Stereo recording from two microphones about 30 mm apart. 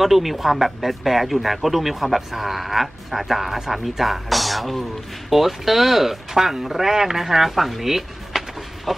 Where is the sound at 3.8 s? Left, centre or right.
Centre.